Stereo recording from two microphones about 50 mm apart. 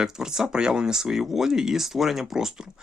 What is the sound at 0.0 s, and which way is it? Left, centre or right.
Speech, centre.